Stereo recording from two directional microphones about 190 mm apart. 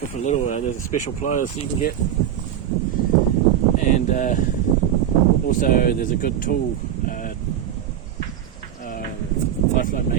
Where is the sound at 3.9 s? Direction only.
45° left (ahead or behind).